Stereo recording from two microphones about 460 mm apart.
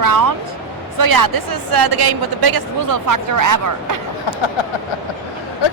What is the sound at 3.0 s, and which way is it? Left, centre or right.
Speech, right.